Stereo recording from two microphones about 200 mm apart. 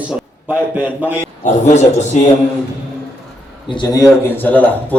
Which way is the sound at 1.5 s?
35° left (ahead or behind).